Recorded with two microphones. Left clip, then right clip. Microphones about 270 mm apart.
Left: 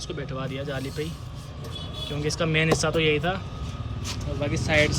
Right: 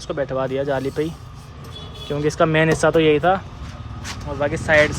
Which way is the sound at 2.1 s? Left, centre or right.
Centre.